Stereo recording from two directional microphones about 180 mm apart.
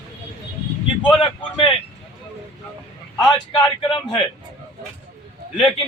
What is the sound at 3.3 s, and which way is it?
Speech, 25° left (ahead or behind).